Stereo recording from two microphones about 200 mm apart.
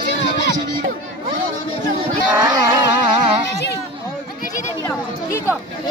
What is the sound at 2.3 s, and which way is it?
Music, 20° right (ahead or behind).